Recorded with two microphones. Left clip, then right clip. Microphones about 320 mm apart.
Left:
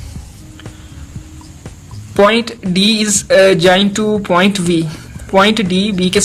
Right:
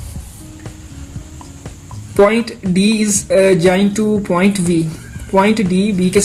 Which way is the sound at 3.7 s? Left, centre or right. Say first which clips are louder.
Left 3 dB; left.